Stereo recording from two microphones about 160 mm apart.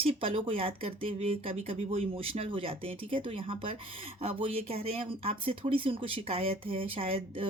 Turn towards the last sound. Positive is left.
turn(degrees=-35)  # may be behind; listen again after turning